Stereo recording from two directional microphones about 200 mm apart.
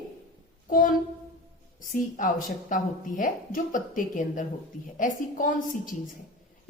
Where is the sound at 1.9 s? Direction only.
40° left (ahead or behind).